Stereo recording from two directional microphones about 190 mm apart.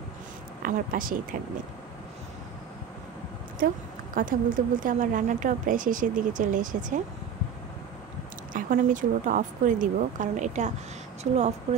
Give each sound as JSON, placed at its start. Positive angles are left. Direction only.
{"t": 0.6, "sound": "a woman's voice", "side_deg": -45}
{"t": 3.5, "sound": "a woman's voice", "side_deg": -50}
{"t": 8.5, "sound": "speech", "side_deg": -40}